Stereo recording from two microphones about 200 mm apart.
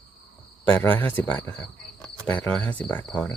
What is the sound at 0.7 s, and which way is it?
Speech, 10° left (ahead or behind).